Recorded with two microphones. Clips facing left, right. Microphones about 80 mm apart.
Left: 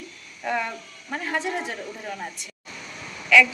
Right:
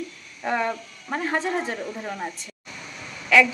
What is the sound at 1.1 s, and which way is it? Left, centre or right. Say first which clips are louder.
Speech: right 3 dB; right.